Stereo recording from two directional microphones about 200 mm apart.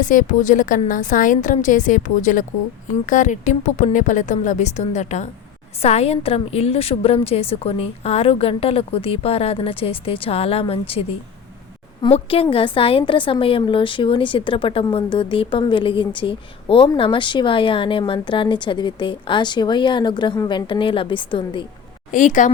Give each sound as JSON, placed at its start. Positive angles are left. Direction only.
{"t": 0.0, "sound": "a woman's voice", "side_deg": 40}
{"t": 12.0, "sound": "a woman's voice", "side_deg": 30}
{"t": 22.1, "sound": "a woman's voice", "side_deg": 40}